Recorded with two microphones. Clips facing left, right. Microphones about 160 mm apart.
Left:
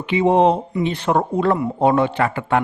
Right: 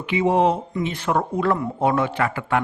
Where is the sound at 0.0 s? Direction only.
30° left (ahead or behind).